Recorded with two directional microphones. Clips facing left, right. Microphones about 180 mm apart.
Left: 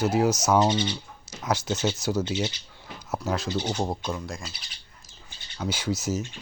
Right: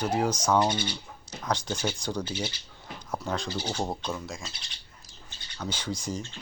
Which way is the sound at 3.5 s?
20° left (ahead or behind).